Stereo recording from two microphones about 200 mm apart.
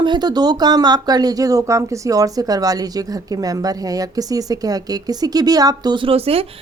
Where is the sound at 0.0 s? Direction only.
20° right (ahead or behind).